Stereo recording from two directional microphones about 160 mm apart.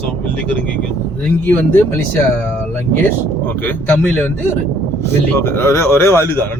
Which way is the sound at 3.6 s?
10° left (ahead or behind).